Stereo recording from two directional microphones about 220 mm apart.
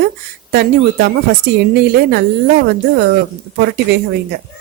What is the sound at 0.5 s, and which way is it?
A woman's voice, 45° right (ahead or behind).